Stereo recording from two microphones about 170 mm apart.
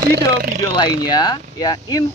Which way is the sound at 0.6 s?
25° left (ahead or behind).